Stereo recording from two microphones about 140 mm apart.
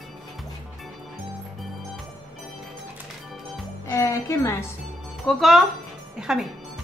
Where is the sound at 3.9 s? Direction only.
20° left (ahead or behind).